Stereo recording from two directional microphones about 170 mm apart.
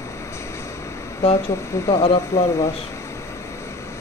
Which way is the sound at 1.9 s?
35° left (ahead or behind).